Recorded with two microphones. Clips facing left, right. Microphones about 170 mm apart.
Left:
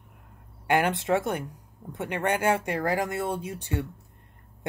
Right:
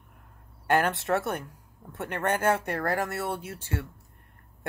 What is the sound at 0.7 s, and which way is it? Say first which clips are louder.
Speech: left 1 dB; 15° left (ahead or behind).